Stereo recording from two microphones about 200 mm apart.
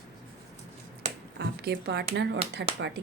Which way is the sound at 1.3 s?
55° right (ahead or behind).